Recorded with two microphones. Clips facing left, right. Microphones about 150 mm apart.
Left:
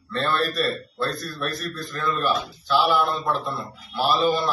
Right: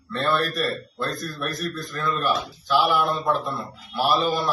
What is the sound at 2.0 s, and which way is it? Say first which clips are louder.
A man's voice: even; 15° right (ahead or behind).